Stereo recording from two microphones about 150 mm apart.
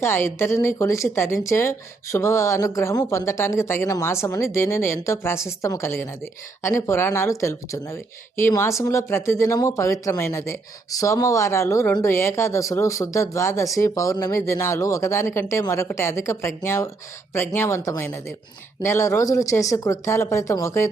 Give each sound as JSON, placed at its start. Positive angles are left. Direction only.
{"t": 0.0, "sound": "speech", "side_deg": 15}